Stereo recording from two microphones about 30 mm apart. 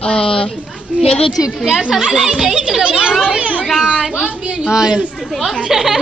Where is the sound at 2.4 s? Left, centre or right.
Right.